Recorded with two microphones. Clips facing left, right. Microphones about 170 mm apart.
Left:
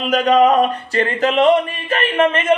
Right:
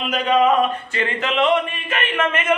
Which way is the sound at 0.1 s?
45° left (ahead or behind).